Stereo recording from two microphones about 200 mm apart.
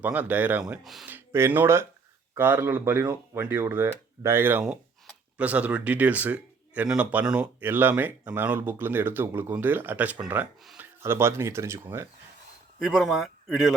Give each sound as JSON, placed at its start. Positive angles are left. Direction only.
{"t": 0.0, "sound": "speech", "side_deg": -10}
{"t": 12.8, "sound": "speech", "side_deg": 0}